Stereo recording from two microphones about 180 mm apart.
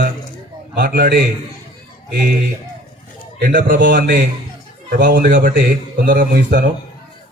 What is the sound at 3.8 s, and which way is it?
Speech, 75° right (ahead or behind).